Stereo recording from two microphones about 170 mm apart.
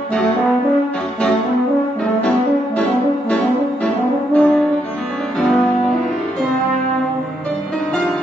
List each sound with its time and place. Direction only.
3.8 s french horn: 5° left (ahead or behind)